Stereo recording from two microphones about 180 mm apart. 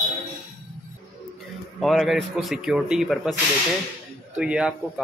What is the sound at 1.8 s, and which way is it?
Speech, centre (ahead or behind).